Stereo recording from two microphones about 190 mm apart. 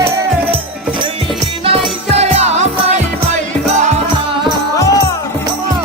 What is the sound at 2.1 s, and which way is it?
Music, 35° right (ahead or behind).